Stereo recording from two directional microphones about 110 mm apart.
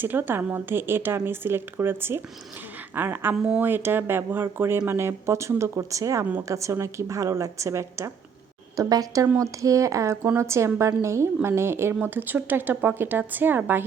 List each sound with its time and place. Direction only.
0.0 s a woman's voice: 20° right (ahead or behind)